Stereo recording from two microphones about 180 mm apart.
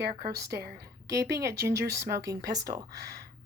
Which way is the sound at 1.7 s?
65° right (ahead or behind).